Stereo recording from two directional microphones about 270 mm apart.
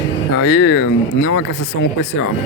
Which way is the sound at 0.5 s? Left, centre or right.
Left.